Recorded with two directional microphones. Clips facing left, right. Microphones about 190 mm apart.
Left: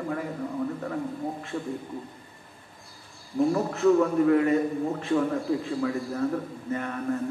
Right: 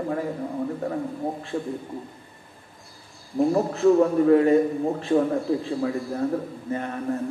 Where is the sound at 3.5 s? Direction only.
30° right (ahead or behind).